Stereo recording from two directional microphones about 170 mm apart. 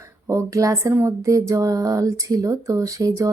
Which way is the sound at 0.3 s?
20° right (ahead or behind).